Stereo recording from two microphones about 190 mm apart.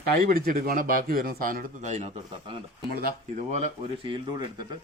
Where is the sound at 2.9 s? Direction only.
55° right (ahead or behind).